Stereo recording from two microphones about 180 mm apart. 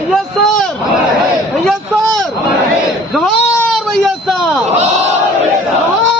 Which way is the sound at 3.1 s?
Centre (ahead or behind).